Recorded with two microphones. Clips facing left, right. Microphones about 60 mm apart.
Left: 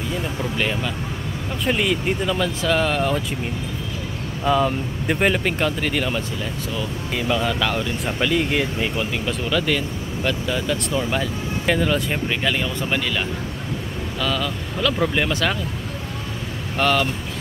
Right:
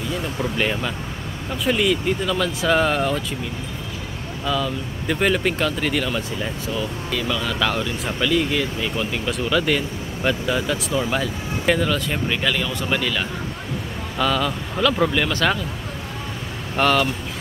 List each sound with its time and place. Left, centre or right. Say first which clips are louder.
0.6 s speech: right 1 dB; centre
1.7 s speech: right 1 dB; centre
2.6 s speech: right 2 dB; centre
4.5 s speech: left 5 dB; left; by 6.0 s centre
7.1 s speech: left 4 dB; left
7.4 s speech: even; centre
8.2 s speech: even; centre
8.9 s speech: even; centre
14.2 s speech: right 4 dB; centre
16.8 s speech: right 1 dB; centre